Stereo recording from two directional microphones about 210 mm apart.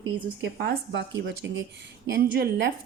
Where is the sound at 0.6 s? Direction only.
55° right (ahead or behind).